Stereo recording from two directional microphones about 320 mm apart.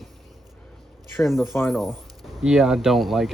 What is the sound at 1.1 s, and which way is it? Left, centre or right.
Speech, centre.